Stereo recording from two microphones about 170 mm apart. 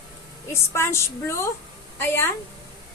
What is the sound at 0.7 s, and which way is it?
Speech, 15° left (ahead or behind).